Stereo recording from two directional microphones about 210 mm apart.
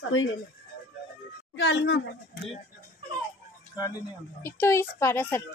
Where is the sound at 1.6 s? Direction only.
55° left (ahead or behind).